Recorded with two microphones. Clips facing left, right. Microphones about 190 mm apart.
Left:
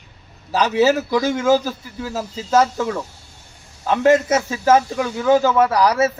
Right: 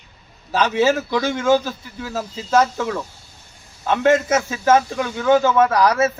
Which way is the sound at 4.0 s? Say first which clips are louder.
Left 2 dB; 30° left (ahead or behind).